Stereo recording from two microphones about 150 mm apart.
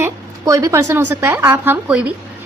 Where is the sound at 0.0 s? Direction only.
20° right (ahead or behind).